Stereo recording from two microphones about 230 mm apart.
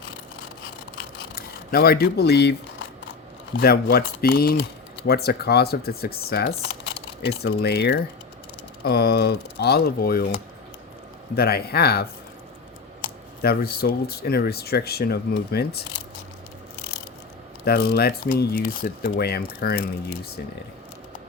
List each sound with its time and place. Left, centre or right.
1.4 s speech: left
3.6 s speech: left
11.3 s speech: left
13.4 s speech: left
17.7 s speech: left